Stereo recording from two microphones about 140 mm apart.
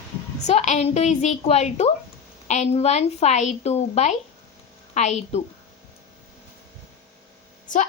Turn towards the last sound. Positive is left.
turn(degrees=65)  # may be behind; listen again after turning